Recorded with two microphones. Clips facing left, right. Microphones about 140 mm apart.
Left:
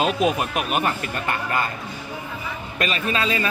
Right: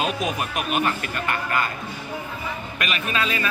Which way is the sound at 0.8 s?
25° left (ahead or behind).